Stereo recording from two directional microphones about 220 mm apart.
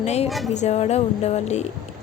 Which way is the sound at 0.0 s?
30° left (ahead or behind).